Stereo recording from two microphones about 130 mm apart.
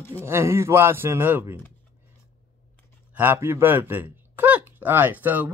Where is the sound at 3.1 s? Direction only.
15° right (ahead or behind).